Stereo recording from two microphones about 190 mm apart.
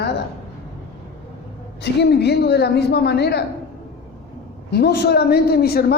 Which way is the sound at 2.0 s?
60° left (ahead or behind).